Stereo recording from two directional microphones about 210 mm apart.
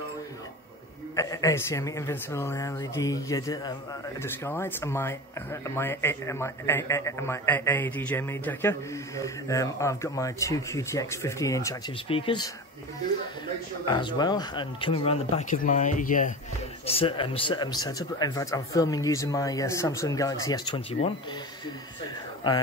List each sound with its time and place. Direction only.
1.1 s speech: 15° left (ahead or behind)
13.8 s speech: 20° left (ahead or behind); by 16.3 s 40° left (ahead or behind)
16.8 s speech: 25° left (ahead or behind)